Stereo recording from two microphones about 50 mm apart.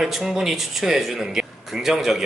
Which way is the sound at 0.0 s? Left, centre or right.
Centre.